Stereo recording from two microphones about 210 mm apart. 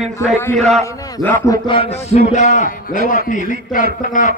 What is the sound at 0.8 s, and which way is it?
A man's voice, 15° left (ahead or behind).